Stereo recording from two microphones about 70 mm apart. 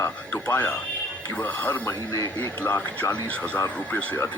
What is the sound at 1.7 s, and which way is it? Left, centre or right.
Speech, left.